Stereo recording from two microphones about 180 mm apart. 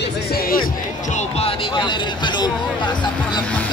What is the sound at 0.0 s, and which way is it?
Music, 60° left (ahead or behind).